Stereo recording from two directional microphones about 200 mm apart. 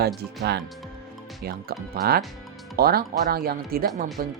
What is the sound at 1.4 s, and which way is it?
Speech, 50° right (ahead or behind).